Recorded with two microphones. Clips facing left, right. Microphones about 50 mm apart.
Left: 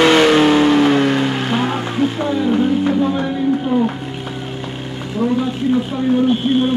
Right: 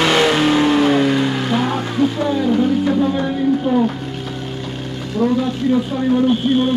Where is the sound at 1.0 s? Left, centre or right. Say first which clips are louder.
Even; left.